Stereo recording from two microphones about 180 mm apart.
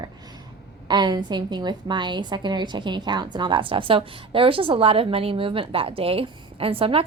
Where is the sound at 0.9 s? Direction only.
25° right (ahead or behind).